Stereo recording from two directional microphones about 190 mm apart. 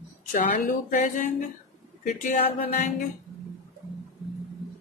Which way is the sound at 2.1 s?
45° left (ahead or behind).